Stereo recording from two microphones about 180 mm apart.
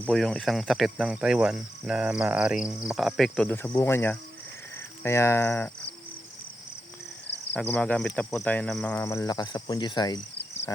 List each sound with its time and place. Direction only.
0.0 s speech: 5° left (ahead or behind)
3.8 s cricket: 15° left (ahead or behind)
7.5 s cricket: 10° left (ahead or behind)
9.0 s cricket: 20° left (ahead or behind)